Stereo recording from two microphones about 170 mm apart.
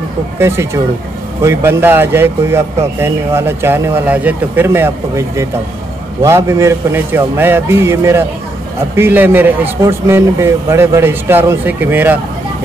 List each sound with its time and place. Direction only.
0.4 s speech: 15° right (ahead or behind)